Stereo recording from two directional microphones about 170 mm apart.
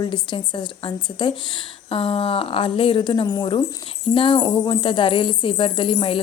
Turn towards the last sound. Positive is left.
turn(degrees=35)  # may be behind; listen again after turning